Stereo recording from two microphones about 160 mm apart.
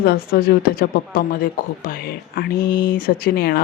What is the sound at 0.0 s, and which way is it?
Speech, 75° left (ahead or behind).